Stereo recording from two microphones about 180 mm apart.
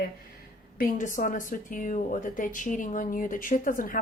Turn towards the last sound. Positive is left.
turn(degrees=50)  # may be behind; listen again after turning